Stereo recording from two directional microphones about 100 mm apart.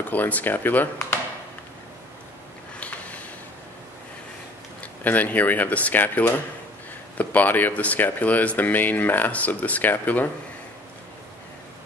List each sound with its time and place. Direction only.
0.1 s speech: 15° left (ahead or behind)
2.8 s a sound: 15° left (ahead or behind)
5.0 s speech: 15° left (ahead or behind)